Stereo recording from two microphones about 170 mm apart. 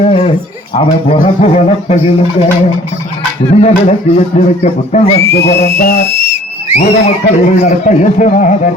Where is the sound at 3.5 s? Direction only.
40° left (ahead or behind).